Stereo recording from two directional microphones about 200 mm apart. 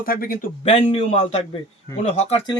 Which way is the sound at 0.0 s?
45° left (ahead or behind).